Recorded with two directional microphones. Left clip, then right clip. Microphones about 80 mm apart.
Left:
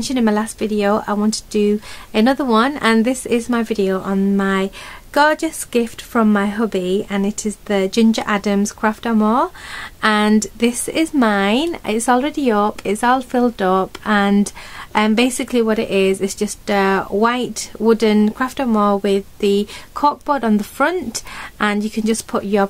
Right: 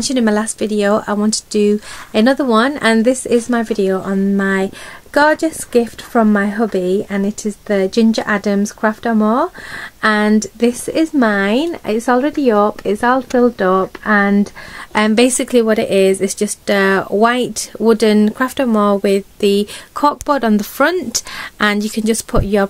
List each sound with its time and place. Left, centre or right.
0.0 s speech: right; by 14.3 s centre
14.9 s speech: right